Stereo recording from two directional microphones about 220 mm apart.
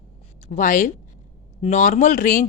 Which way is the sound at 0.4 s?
35° left (ahead or behind).